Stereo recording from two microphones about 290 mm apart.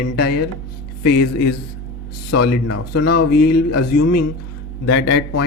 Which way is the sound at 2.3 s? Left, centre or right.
Left.